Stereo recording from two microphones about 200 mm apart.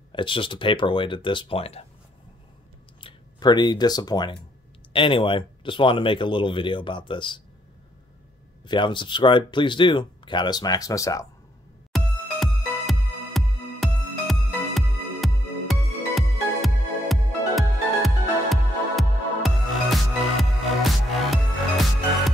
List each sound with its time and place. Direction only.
0.1 s speech: 25° left (ahead or behind)
3.0 s speech: 25° left (ahead or behind)
8.6 s speech: 25° left (ahead or behind)
11.9 s music: centre (ahead or behind)